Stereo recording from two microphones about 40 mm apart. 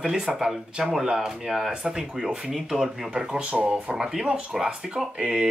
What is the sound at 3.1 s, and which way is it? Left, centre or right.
Speech, right.